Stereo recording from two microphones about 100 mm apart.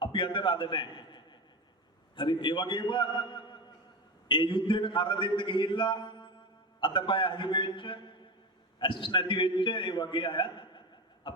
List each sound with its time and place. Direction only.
0.0 s a man's voice: 55° left (ahead or behind)